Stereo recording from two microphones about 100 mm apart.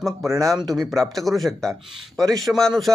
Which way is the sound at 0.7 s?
Centre (ahead or behind).